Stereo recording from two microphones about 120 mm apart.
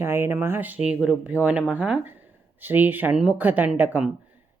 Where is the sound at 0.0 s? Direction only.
20° right (ahead or behind).